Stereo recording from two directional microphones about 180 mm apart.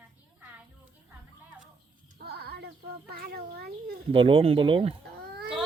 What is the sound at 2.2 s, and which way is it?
Child singing, 60° right (ahead or behind).